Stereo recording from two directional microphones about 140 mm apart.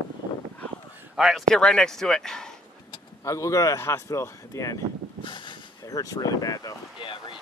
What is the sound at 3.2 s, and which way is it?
Speech, 20° left (ahead or behind).